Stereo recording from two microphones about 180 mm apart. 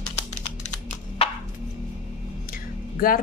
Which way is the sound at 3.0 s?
55° left (ahead or behind).